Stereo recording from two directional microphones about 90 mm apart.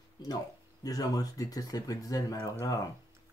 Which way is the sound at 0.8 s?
45° left (ahead or behind).